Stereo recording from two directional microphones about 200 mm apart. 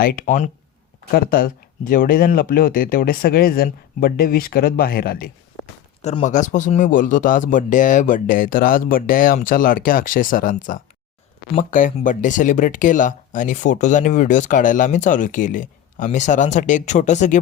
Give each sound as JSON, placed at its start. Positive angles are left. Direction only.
{"t": 0.0, "sound": "speech", "side_deg": 45}
{"t": 1.1, "sound": "speech", "side_deg": 50}
{"t": 6.0, "sound": "speech", "side_deg": 35}